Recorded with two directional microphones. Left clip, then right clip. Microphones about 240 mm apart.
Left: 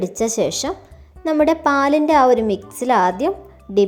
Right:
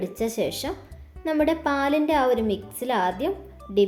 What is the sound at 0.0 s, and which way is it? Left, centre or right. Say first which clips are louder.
A woman's voice: left 7 dB; left.